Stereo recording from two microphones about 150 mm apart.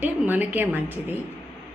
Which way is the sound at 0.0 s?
10° right (ahead or behind).